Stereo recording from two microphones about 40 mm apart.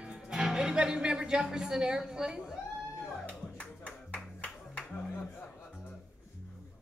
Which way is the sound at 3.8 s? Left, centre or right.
Left.